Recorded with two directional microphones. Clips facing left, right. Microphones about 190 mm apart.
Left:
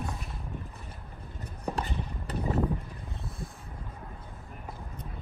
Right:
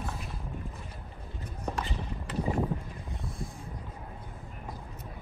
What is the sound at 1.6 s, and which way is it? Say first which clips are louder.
Clip-clop: left 2 dB; 35° left (ahead or behind).